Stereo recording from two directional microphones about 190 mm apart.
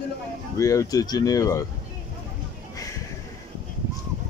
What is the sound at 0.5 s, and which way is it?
Speech, 15° left (ahead or behind).